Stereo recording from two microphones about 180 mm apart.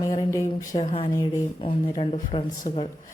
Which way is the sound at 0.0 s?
20° left (ahead or behind).